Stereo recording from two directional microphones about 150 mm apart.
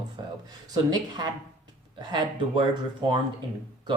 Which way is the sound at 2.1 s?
30° right (ahead or behind).